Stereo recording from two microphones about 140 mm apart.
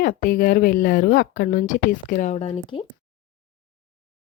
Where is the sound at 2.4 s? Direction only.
40° left (ahead or behind).